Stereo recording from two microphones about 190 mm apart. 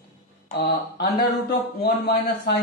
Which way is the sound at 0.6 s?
55° left (ahead or behind).